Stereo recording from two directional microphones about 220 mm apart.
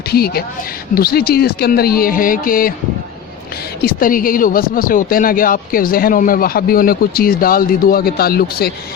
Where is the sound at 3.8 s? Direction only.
40° left (ahead or behind).